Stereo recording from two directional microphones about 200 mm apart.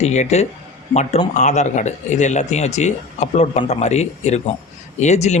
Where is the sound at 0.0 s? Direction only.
35° left (ahead or behind).